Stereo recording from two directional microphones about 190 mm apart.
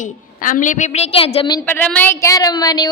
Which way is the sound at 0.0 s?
45° left (ahead or behind).